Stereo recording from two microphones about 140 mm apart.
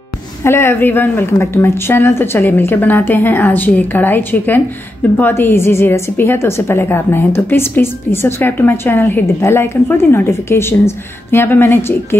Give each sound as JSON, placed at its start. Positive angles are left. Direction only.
{"t": 0.4, "sound": "a woman's voice", "side_deg": 20}